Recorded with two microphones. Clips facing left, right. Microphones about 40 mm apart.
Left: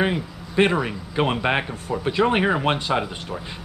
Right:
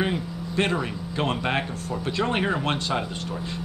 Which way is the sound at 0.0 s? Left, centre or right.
Centre.